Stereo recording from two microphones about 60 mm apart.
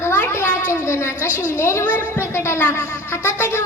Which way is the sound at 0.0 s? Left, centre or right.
Left.